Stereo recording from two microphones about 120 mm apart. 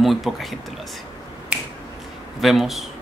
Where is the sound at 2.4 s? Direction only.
Centre (ahead or behind).